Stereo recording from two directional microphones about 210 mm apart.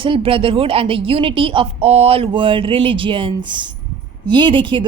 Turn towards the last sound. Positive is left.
turn(degrees=-25)  # may be behind; listen again after turning